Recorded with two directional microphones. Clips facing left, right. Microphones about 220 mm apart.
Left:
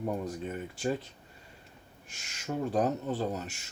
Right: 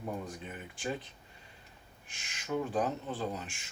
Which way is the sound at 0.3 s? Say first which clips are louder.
Left 8 dB; 40° left (ahead or behind).